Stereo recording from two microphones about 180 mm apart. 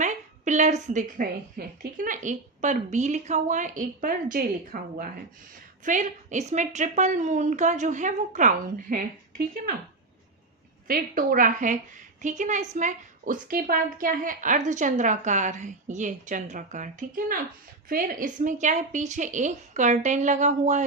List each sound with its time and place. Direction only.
0.0 s a woman's voice: 40° right (ahead or behind)
10.8 s a woman's voice: 55° right (ahead or behind)